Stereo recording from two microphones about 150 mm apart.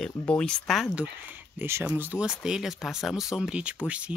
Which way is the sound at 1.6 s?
15° right (ahead or behind).